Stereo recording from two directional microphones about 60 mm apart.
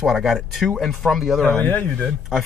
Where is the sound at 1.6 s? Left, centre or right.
Left.